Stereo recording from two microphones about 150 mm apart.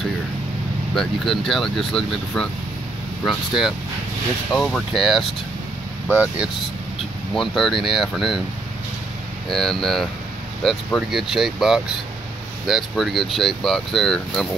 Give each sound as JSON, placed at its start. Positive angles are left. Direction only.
{"t": 0.9, "sound": "speech", "side_deg": 0}
{"t": 9.5, "sound": "speech", "side_deg": 0}